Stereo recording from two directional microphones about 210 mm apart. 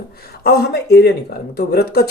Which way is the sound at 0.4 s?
50° left (ahead or behind).